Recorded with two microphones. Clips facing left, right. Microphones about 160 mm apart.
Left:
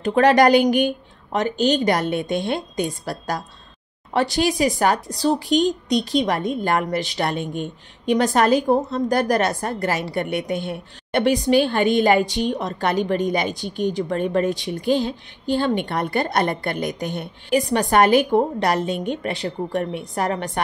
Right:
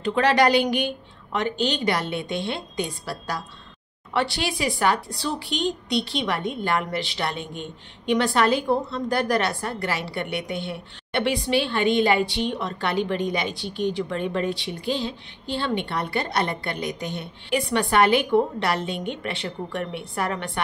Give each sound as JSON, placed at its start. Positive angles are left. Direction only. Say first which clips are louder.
{"t": 0.0, "sound": "speech", "louder": "left 5 dB", "side_deg": 45}